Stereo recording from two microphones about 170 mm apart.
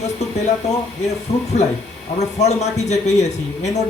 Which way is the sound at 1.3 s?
40° left (ahead or behind).